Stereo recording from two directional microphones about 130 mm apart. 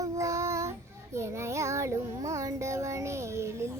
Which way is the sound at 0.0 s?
25° right (ahead or behind).